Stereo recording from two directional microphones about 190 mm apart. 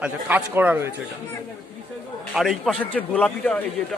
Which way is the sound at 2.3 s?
Centre (ahead or behind).